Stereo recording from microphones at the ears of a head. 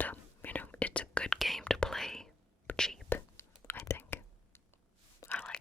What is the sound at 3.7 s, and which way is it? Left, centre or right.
Whispering, left.